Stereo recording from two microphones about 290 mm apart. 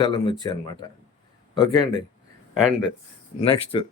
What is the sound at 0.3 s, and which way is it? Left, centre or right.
Speech, centre.